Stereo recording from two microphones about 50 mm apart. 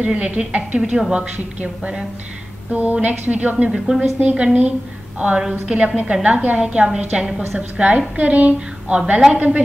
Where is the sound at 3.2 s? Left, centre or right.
Right.